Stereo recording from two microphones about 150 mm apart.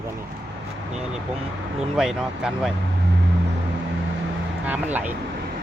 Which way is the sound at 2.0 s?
5° right (ahead or behind).